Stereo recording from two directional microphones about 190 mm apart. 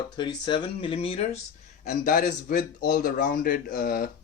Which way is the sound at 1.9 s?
50° left (ahead or behind).